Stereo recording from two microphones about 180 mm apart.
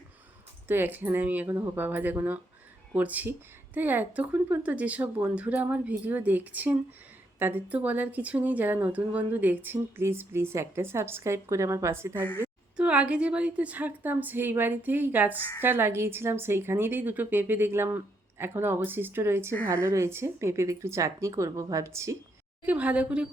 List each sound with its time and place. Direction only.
0.7 s speech: 10° right (ahead or behind)